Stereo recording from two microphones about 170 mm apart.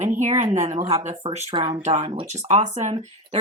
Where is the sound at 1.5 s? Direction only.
30° right (ahead or behind).